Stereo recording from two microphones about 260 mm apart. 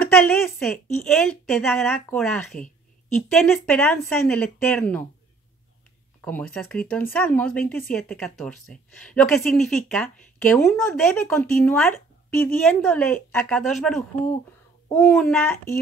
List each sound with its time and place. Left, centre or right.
0.1 s speech: centre
6.2 s speech: centre